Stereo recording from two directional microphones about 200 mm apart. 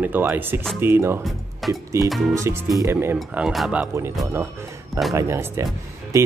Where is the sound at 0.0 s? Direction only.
10° right (ahead or behind).